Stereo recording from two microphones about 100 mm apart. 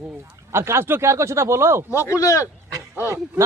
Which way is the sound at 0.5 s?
25° right (ahead or behind).